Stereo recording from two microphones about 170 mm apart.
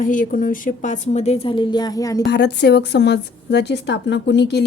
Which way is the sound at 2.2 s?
80° left.